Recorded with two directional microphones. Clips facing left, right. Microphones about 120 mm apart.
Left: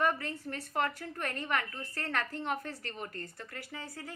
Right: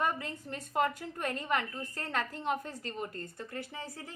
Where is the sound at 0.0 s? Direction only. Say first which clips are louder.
Left 2 dB; 15° right (ahead or behind).